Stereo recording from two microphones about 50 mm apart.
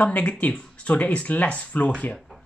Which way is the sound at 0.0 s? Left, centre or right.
Left.